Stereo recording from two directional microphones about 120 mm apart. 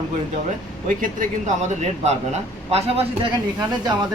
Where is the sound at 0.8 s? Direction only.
90° right.